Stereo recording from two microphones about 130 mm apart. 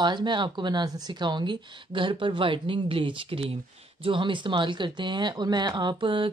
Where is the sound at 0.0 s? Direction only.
35° right (ahead or behind).